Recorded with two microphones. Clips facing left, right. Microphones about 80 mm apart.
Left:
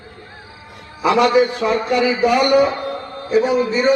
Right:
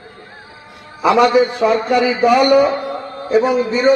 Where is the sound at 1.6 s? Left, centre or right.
Centre.